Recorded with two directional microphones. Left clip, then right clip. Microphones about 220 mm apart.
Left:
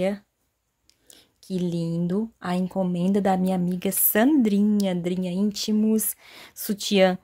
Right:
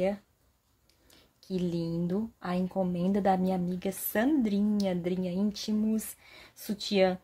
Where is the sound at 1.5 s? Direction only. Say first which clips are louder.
Left 4 dB; 30° left (ahead or behind).